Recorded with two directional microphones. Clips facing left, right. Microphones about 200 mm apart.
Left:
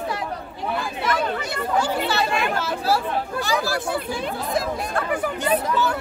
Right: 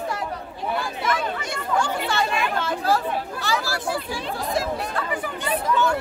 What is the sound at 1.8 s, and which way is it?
Speech, 5° left (ahead or behind).